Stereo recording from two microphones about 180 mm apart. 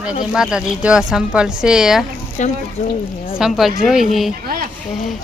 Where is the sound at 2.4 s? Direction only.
45° left (ahead or behind).